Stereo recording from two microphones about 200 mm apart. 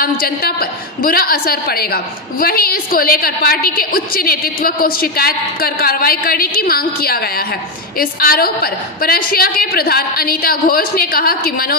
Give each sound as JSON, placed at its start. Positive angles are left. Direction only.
{"t": 0.0, "sound": "a woman's voice", "side_deg": 50}